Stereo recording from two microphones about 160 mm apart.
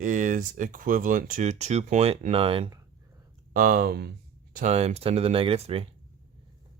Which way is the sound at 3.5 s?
60° right (ahead or behind).